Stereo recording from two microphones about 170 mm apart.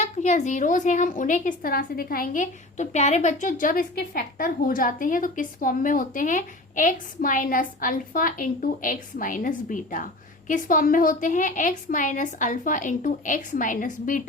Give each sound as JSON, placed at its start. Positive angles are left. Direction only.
{"t": 0.0, "sound": "a woman's voice", "side_deg": 45}